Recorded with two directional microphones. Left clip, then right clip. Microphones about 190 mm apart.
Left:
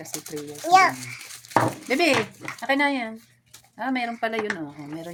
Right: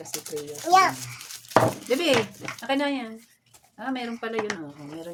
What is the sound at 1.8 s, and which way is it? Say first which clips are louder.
Speech: left 1 dB; 45° left (ahead or behind).